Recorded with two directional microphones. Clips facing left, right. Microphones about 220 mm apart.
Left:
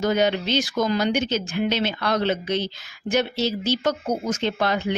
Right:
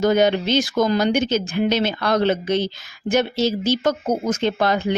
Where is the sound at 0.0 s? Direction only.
45° right (ahead or behind).